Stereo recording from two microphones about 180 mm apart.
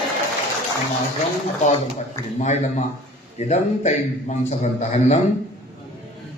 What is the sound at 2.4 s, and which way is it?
A man's voice, 40° left (ahead or behind).